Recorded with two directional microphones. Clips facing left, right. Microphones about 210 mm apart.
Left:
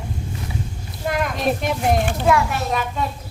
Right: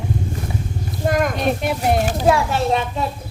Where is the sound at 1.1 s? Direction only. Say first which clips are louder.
Right 4 dB; 45° right (ahead or behind).